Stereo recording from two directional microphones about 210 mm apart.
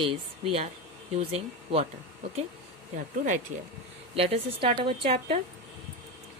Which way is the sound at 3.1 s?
35° right (ahead or behind).